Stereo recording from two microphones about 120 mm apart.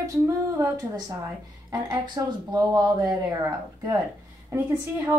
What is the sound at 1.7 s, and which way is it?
A woman's voice, 35° right (ahead or behind).